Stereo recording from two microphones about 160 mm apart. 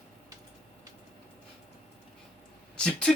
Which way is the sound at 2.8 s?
5° left (ahead or behind).